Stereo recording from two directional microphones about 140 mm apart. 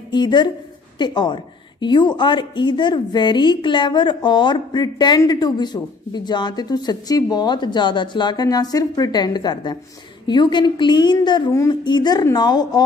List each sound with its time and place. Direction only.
0.1 s a woman's voice: 30° left (ahead or behind)